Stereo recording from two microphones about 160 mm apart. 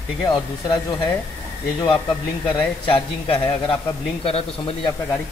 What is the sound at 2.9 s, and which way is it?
A man's voice, 35° left (ahead or behind).